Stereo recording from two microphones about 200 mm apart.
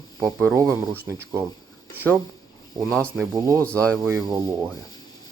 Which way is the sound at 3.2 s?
15° right (ahead or behind).